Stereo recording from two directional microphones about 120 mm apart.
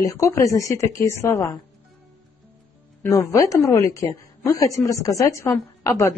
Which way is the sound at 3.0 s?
25° left (ahead or behind).